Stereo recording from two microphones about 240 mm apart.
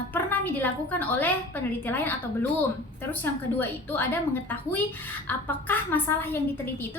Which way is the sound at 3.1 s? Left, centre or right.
Centre.